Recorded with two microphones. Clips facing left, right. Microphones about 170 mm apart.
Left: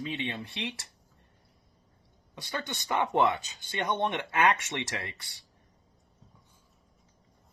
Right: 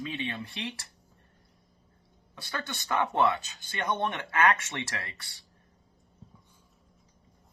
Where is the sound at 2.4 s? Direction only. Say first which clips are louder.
Left 1 dB; 15° left (ahead or behind).